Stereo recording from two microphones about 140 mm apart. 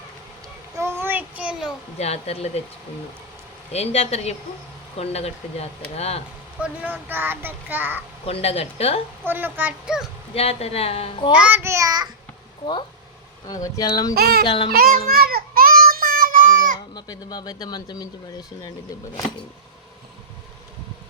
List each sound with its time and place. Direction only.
0.8 s child singing: 15° right (ahead or behind)
2.0 s a woman's voice: 50° left (ahead or behind)
3.7 s a woman's voice: 50° left (ahead or behind)
6.6 s speech: 10° right (ahead or behind)
8.3 s a woman's voice: 45° left (ahead or behind)
9.2 s speech: 15° right (ahead or behind)
10.3 s a woman's voice: 45° left (ahead or behind)
11.3 s child singing: 10° right (ahead or behind)
13.5 s speech: 30° left (ahead or behind)
14.2 s a child's voice: 90° right
14.4 s music: 35° left (ahead or behind)
14.7 s child singing: 90° right
16.9 s speech: 30° left (ahead or behind)